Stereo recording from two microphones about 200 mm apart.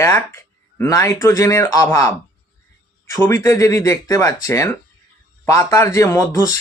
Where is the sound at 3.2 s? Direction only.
10° left (ahead or behind).